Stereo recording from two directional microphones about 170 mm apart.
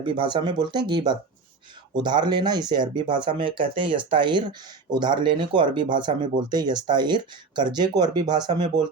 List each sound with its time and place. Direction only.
0.0 s speech: 30° right (ahead or behind)